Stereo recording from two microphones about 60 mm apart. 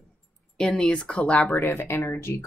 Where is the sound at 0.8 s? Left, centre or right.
Centre.